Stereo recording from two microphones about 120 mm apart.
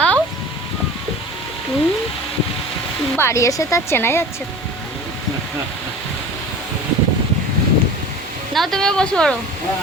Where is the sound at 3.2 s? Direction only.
25° left (ahead or behind).